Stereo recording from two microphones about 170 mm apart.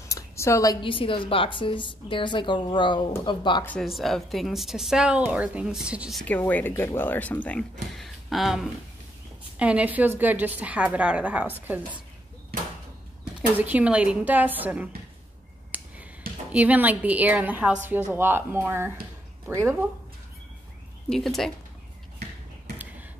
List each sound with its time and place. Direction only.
0.1 s a sound: 15° left (ahead or behind)
0.8 s a woman's voice: 30° left (ahead or behind)
3.6 s speech: centre (ahead or behind)
6.2 s a woman's voice: 10° left (ahead or behind); by 11.8 s 10° right (ahead or behind)
13.6 s a woman's voice: 10° right (ahead or behind)
15.7 s finger snapping: 10° right (ahead or behind)
16.5 s a woman's voice: 10° right (ahead or behind)
21.1 s speech: centre (ahead or behind)